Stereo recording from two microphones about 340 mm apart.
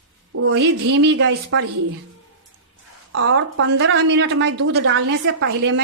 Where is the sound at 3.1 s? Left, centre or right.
Right.